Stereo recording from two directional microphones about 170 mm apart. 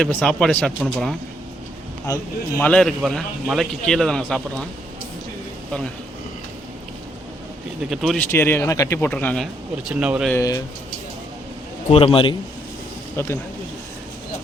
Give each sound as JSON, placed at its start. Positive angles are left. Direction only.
{"t": 0.0, "sound": "a man's voice", "side_deg": 5}
{"t": 2.6, "sound": "a man's voice", "side_deg": 5}
{"t": 7.8, "sound": "a man's voice", "side_deg": 0}
{"t": 8.3, "sound": "speech", "side_deg": 15}
{"t": 9.9, "sound": "speech", "side_deg": -5}
{"t": 10.3, "sound": "speech", "side_deg": 20}
{"t": 11.9, "sound": "a man's voice", "side_deg": 35}
{"t": 13.1, "sound": "speech", "side_deg": 15}